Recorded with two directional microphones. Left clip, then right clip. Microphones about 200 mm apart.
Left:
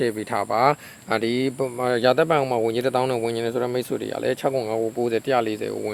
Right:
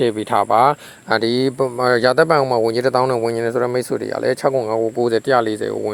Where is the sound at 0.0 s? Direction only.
25° right (ahead or behind).